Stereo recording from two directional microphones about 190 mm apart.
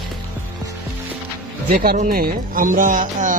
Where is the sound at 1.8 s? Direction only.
50° right (ahead or behind).